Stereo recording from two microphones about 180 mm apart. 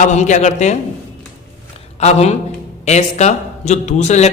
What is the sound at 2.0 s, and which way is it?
A man's voice, 35° left (ahead or behind).